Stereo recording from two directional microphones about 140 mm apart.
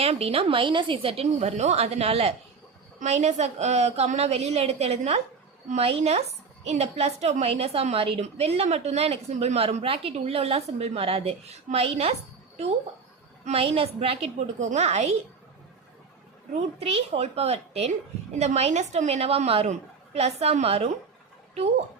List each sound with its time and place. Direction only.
0.0 s a woman's voice: 45° right (ahead or behind)
13.4 s a woman's voice: 45° right (ahead or behind)
16.6 s a woman's voice: 50° right (ahead or behind)